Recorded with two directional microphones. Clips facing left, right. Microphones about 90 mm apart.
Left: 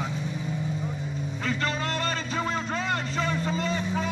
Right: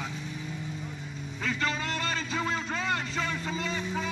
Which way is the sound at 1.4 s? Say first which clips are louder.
Left 1 dB; 35° left (ahead or behind).